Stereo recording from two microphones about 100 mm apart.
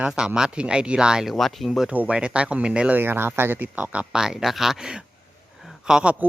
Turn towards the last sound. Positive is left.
turn(degrees=-10)  # may be behind; listen again after turning